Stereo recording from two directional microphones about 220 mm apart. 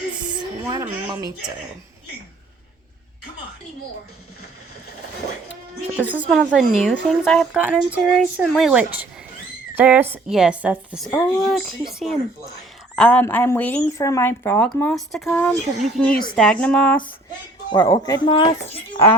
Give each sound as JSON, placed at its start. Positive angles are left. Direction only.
{"t": 0.7, "sound": "a woman's voice", "side_deg": -15}
{"t": 6.0, "sound": "a woman's voice", "side_deg": -5}
{"t": 11.1, "sound": "a woman's voice", "side_deg": 10}
{"t": 14.9, "sound": "a woman's voice", "side_deg": 0}
{"t": 17.7, "sound": "speech", "side_deg": 20}